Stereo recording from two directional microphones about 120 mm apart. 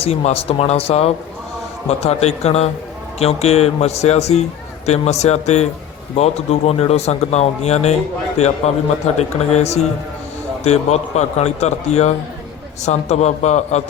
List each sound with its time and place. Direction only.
0.0 s speech: 60° left (ahead or behind)